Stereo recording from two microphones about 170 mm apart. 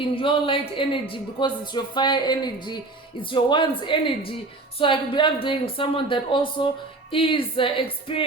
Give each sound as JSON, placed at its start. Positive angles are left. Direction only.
{"t": 0.2, "sound": "speech", "side_deg": 30}